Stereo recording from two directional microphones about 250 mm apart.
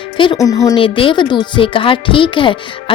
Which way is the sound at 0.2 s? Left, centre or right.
Centre.